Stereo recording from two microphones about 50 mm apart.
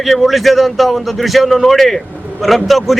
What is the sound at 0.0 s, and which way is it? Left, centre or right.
Speech, centre.